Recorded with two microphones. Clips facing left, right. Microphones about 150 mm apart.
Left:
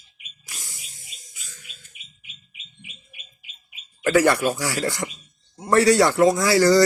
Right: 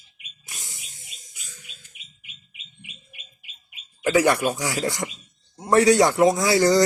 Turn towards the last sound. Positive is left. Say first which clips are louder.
# left 2 dB
turn(degrees=-20)  # may be behind; listen again after turning